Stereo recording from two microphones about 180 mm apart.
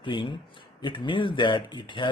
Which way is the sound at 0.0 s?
25° left (ahead or behind).